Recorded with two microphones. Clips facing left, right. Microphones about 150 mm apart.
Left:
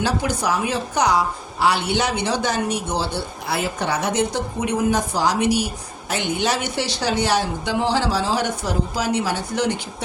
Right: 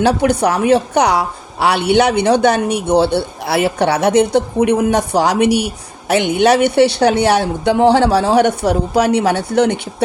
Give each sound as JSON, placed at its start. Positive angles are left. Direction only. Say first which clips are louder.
{"t": 0.0, "sound": "a woman's voice", "louder": "right 9 dB", "side_deg": -65}